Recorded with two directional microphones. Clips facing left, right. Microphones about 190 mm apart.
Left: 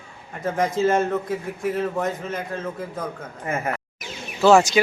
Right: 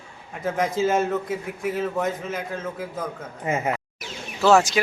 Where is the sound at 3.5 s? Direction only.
15° right (ahead or behind).